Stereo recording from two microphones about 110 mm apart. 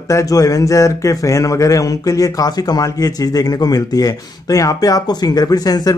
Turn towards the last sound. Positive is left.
turn(degrees=35)  # may be behind; listen again after turning